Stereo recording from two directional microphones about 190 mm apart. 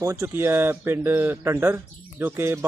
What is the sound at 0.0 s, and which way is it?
Speech, 15° right (ahead or behind).